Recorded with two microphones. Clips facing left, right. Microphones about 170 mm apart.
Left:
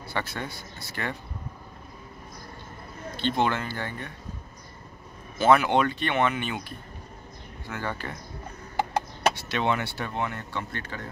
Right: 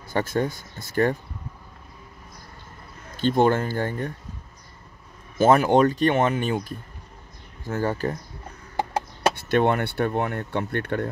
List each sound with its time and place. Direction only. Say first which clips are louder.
0.1 s speech: right 9 dB; 45° right (ahead or behind)
3.2 s speech: right 6 dB; 45° right (ahead or behind)
5.4 s speech: right 4 dB; 40° right (ahead or behind)
9.4 s speech: right 6 dB; 50° right (ahead or behind)